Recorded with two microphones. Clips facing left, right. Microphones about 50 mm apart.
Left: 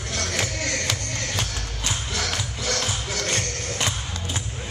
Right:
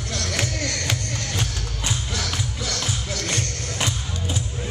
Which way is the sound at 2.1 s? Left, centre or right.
Left.